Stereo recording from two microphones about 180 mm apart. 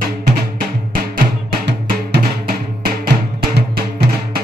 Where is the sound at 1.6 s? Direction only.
60° right (ahead or behind).